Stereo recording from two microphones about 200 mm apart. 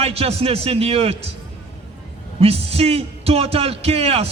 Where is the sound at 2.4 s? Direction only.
30° right (ahead or behind).